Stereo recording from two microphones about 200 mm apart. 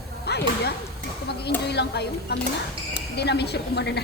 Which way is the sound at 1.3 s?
55° left (ahead or behind).